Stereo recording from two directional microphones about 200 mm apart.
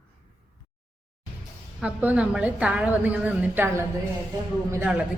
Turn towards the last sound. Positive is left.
turn(degrees=-10)  # may be behind; listen again after turning